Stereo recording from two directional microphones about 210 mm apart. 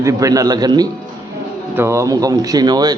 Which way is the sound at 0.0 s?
15° right (ahead or behind).